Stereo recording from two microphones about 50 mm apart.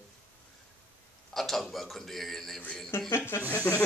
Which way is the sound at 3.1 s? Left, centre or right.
Left.